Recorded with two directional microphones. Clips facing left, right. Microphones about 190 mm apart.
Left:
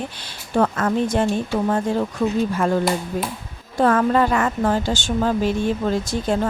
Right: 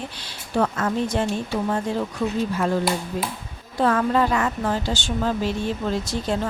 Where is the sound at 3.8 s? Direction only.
50° left (ahead or behind).